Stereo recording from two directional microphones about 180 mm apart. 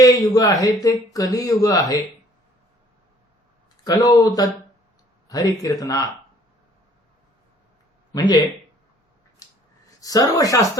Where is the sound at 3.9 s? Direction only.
20° left (ahead or behind).